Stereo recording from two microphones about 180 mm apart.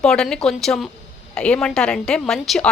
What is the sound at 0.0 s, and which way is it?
Speech, 5° left (ahead or behind).